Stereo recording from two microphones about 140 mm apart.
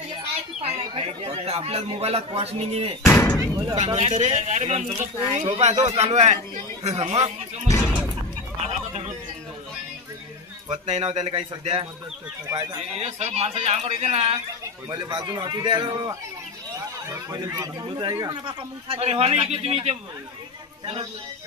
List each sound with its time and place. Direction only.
0.6 s speech: 45° right (ahead or behind)
3.1 s slam: 15° left (ahead or behind)
3.7 s speech: 50° right (ahead or behind)
8.6 s a sound: 50° right (ahead or behind)
10.7 s speech: 45° right (ahead or behind)
12.4 s a man's voice: 30° right (ahead or behind)
13.0 s speech: 50° right (ahead or behind)
14.9 s a man's voice: 25° right (ahead or behind)
18.9 s a man's voice: 45° right (ahead or behind)